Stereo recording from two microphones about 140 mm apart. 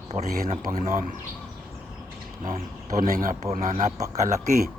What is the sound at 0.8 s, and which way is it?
Speech, 70° right (ahead or behind).